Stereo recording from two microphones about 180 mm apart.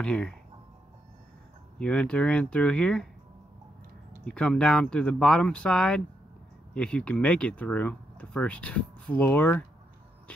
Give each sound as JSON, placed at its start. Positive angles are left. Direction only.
{"t": 0.0, "sound": "speech", "side_deg": 5}
{"t": 1.8, "sound": "speech", "side_deg": 5}
{"t": 4.2, "sound": "speech", "side_deg": 5}